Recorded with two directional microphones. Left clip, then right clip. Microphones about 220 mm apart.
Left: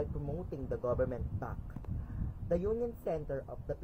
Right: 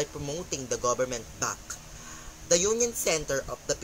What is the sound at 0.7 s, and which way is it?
Speech, 40° right (ahead or behind).